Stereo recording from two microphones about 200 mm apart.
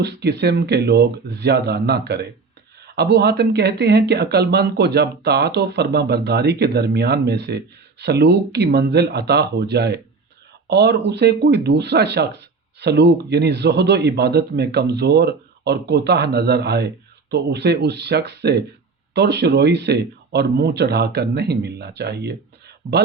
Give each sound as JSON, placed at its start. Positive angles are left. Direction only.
{"t": 0.0, "sound": "speech", "side_deg": -60}